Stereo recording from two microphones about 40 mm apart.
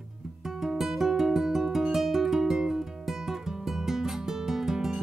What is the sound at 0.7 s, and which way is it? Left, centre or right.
Music, centre.